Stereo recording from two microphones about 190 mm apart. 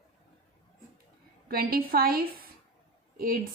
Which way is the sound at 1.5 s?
50° right (ahead or behind).